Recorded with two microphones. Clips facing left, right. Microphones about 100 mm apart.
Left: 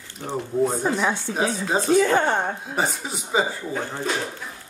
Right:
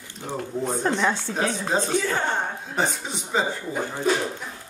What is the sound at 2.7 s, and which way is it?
Speech, 5° left (ahead or behind).